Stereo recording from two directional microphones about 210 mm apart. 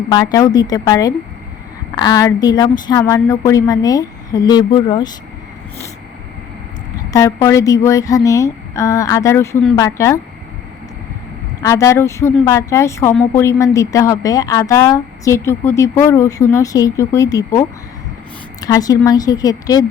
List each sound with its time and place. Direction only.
0.1 s a woman's voice: 20° left (ahead or behind)
7.1 s a woman's voice: 15° left (ahead or behind)
11.6 s a woman's voice: 15° left (ahead or behind)